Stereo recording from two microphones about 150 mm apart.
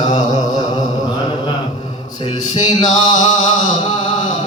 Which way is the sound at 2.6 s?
30° left (ahead or behind).